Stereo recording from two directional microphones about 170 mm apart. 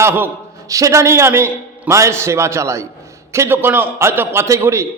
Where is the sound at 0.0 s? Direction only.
15° right (ahead or behind).